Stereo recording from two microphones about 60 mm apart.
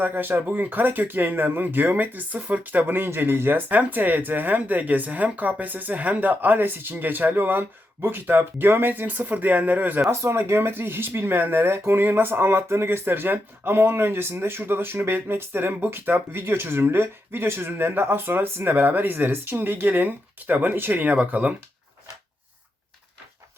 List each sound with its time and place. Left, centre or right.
0.0 s speech: right
10.1 s speech: right